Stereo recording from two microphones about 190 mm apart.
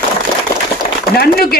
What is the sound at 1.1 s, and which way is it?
Speech, 55° left (ahead or behind).